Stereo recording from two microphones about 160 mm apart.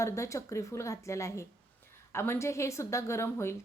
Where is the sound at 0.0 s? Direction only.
20° left (ahead or behind).